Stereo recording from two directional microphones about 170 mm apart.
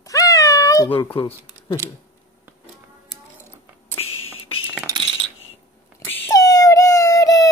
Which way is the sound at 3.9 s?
35° left (ahead or behind).